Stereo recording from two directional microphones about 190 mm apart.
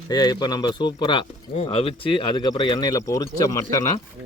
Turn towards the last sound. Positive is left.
turn(degrees=20)  # may be behind; listen again after turning